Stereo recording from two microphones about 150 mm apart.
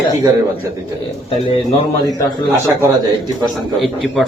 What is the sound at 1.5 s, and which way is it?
Speech, 35° left (ahead or behind).